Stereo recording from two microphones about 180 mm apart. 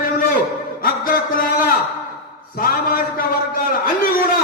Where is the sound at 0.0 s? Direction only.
55° left (ahead or behind).